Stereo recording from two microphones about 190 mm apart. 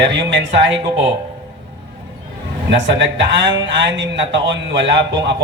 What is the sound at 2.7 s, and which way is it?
Speech, 70° right (ahead or behind).